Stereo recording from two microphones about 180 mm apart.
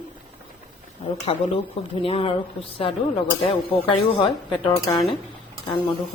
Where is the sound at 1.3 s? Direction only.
30° left (ahead or behind).